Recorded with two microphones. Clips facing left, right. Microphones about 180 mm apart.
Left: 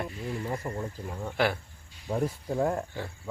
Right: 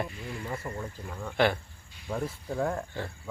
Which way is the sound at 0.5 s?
15° left (ahead or behind).